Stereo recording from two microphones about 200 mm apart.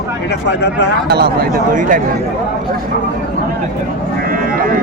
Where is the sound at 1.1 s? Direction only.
50° right (ahead or behind).